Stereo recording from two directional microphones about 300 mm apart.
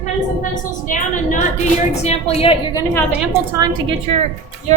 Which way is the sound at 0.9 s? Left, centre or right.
Left.